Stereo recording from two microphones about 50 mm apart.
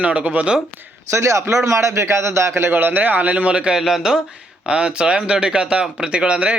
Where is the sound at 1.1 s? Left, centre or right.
Right.